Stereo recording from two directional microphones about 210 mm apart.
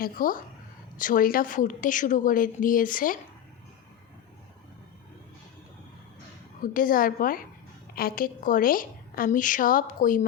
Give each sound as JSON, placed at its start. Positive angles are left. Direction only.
{"t": 0.0, "sound": "a woman's voice", "side_deg": 40}
{"t": 6.6, "sound": "a woman's voice", "side_deg": 40}